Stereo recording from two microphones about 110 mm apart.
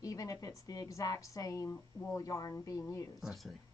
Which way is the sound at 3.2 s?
Centre (ahead or behind).